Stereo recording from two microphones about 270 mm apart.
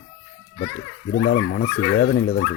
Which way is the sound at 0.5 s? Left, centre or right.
Left.